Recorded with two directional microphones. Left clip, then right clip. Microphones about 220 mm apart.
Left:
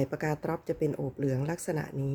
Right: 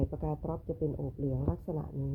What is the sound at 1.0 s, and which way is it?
Speech, 50° left (ahead or behind).